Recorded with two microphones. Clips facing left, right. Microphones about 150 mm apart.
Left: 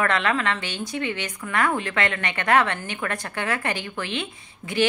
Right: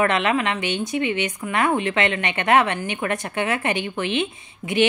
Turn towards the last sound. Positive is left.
turn(degrees=-20)  # may be behind; listen again after turning